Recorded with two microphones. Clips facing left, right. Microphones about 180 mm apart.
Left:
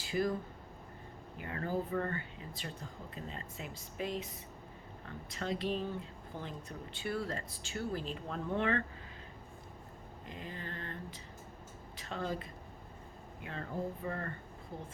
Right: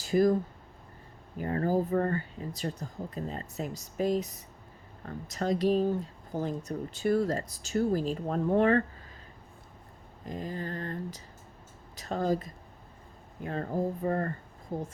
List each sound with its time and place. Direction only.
0.0 s speech: 40° right (ahead or behind)
1.4 s speech: 40° right (ahead or behind)
10.2 s speech: 40° right (ahead or behind)